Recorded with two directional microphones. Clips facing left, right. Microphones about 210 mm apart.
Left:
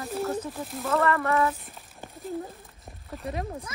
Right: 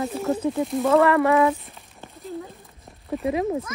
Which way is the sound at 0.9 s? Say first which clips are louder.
Right 7 dB; 85° right.